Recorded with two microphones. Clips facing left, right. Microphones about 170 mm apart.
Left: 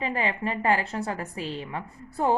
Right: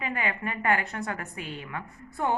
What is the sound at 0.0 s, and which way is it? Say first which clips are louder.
A woman's voice: left 3 dB; 30° left (ahead or behind).